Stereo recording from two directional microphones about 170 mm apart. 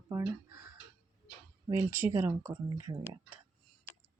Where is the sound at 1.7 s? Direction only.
15° right (ahead or behind).